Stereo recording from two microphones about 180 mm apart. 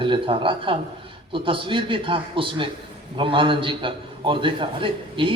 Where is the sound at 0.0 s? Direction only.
30° right (ahead or behind).